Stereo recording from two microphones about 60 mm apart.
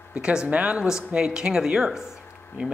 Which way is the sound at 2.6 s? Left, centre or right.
Right.